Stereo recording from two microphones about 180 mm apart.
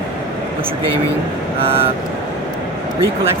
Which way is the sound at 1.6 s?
30° right (ahead or behind).